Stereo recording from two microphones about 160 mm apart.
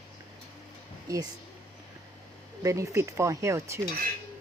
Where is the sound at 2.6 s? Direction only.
20° right (ahead or behind).